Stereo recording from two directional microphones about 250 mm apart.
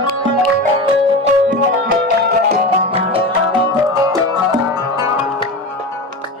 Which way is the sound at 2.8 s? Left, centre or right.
Right.